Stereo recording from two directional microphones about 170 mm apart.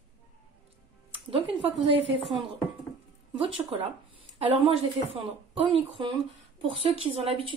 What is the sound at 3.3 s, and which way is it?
Speech, 30° right (ahead or behind).